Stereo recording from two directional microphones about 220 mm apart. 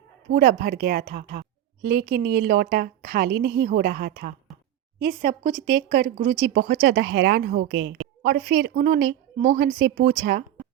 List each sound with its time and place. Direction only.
0.3 s a woman's voice: 50° right (ahead or behind)
9.4 s a woman's voice: 40° right (ahead or behind)